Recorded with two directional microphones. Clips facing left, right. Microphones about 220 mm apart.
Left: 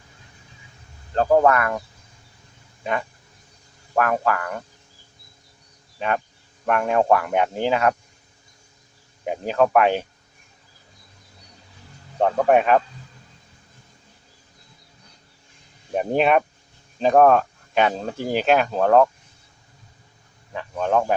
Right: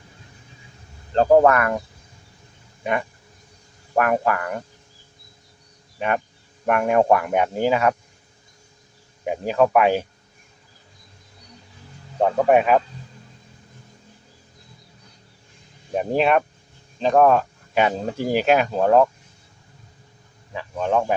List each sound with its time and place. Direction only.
1.1 s speech: 30° right (ahead or behind)
3.9 s speech: 15° right (ahead or behind)
6.0 s speech: 15° right (ahead or behind)
9.2 s speech: 5° right (ahead or behind)
12.2 s a man's voice: 5° right (ahead or behind)
15.9 s a man's voice: centre (ahead or behind)
20.5 s a man's voice: 5° right (ahead or behind)